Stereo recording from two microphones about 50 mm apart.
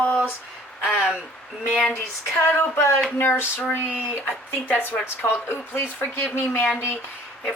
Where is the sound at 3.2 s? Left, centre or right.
Left.